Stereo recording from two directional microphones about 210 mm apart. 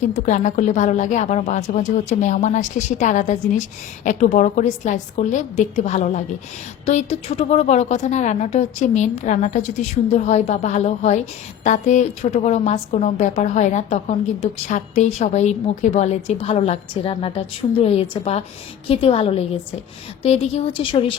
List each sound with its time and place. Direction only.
0.0 s a woman's voice: 35° left (ahead or behind)